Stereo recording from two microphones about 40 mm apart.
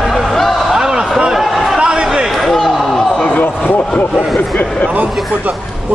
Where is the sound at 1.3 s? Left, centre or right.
Centre.